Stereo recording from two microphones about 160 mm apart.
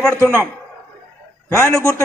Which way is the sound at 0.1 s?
15° right (ahead or behind).